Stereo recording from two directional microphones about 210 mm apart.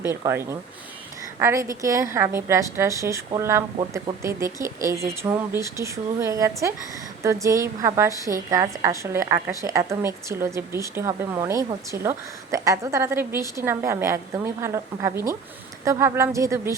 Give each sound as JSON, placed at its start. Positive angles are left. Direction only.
{"t": 0.0, "sound": "a woman's voice", "side_deg": -10}